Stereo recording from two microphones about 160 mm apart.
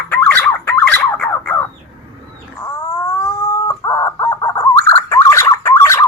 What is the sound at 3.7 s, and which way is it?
Chicken, 20° left (ahead or behind).